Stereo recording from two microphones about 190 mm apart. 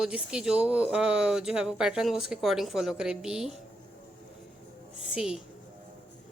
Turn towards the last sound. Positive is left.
turn(degrees=-5)  # may be behind; listen again after turning